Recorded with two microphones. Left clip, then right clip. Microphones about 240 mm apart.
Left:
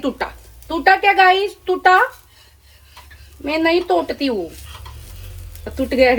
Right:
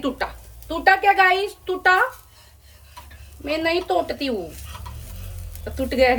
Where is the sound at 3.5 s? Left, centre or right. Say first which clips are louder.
Left 5 dB; centre.